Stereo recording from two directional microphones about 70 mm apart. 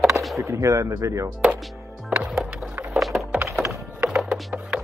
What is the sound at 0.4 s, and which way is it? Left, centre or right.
Speech, right.